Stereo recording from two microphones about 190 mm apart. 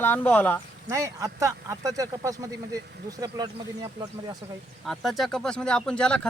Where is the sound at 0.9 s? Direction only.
15° right (ahead or behind).